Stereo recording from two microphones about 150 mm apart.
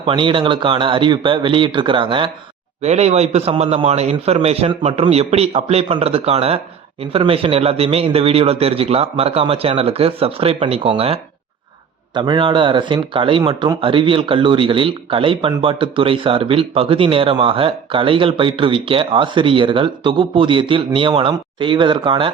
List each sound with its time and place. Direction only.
0.0 s speech: 35° right (ahead or behind)
2.8 s a man's voice: 45° right (ahead or behind)